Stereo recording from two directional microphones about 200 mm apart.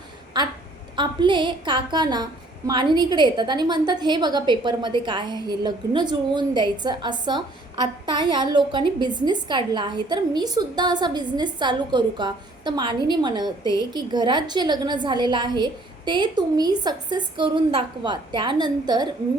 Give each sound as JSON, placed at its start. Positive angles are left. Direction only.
{"t": 0.4, "sound": "a woman's voice", "side_deg": -20}